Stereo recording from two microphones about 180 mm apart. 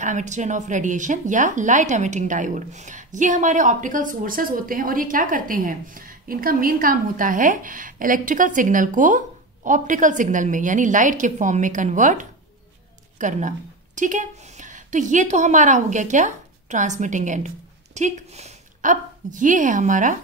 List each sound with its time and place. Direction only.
0.0 s a woman's voice: 40° right (ahead or behind)